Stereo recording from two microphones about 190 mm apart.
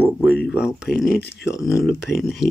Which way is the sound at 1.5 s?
15° left (ahead or behind).